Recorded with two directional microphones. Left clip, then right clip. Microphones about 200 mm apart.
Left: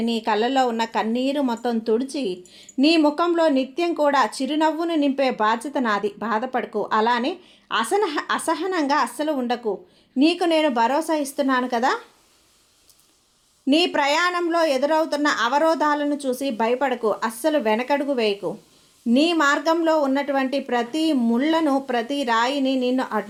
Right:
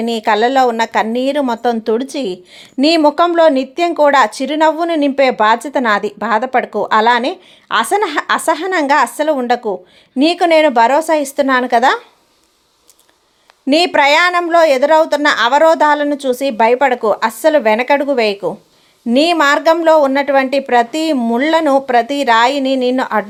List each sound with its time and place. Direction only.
0.0 s a woman's voice: 20° right (ahead or behind)
13.7 s a woman's voice: 30° right (ahead or behind)